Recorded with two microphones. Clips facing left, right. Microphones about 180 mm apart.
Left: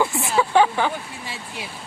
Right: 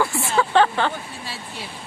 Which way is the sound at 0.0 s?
20° left (ahead or behind).